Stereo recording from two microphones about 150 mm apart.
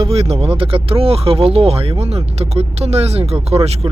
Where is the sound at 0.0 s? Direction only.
40° right (ahead or behind).